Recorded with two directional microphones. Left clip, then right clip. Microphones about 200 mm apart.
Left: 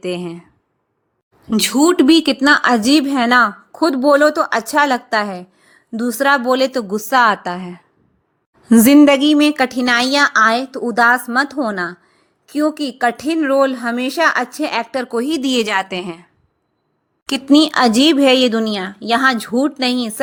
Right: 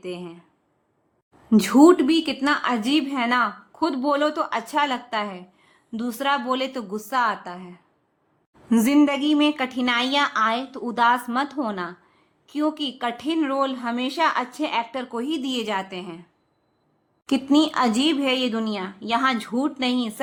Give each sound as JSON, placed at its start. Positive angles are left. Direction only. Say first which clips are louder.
{"t": 0.0, "sound": "a woman's voice", "louder": "left 10 dB", "side_deg": 35}
{"t": 1.8, "sound": "a woman's voice", "louder": "left 4 dB", "side_deg": 35}
{"t": 17.5, "sound": "speech", "louder": "left 8 dB", "side_deg": 30}